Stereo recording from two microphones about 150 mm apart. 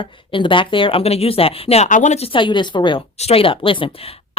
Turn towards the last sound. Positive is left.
turn(degrees=35)  # may be behind; listen again after turning